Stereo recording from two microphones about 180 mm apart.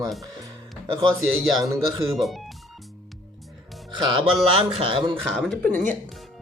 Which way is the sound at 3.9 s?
25° right (ahead or behind).